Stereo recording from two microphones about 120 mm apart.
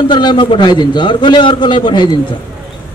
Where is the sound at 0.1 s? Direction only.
40° left (ahead or behind).